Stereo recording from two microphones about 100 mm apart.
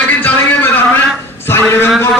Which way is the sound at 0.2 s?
20° left (ahead or behind).